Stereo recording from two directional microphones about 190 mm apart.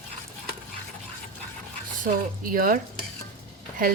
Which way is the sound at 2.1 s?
45° right (ahead or behind).